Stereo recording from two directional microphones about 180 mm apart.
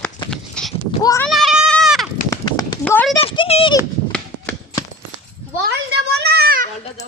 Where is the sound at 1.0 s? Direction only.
15° left (ahead or behind).